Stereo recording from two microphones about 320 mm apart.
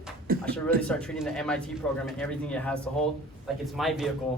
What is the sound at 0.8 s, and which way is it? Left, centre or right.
Speech, centre.